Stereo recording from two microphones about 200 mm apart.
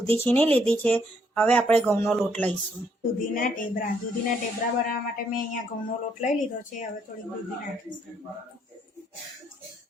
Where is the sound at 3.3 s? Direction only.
45° left (ahead or behind).